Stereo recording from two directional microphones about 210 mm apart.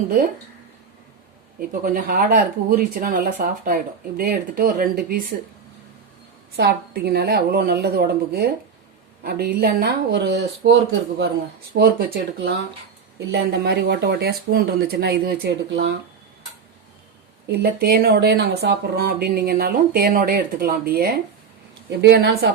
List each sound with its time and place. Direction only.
1.5 s speech: 40° right (ahead or behind)
6.6 s speech: 50° right (ahead or behind)
11.8 s speech: 45° right (ahead or behind)
17.5 s speech: 45° right (ahead or behind)